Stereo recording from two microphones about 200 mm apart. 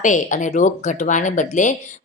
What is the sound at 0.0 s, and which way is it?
A woman's voice, 40° left (ahead or behind).